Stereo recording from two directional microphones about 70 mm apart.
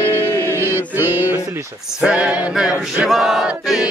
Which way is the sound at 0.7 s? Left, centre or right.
Right.